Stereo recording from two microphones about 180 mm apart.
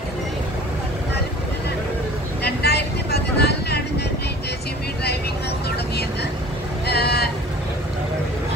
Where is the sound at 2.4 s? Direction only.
65° left (ahead or behind).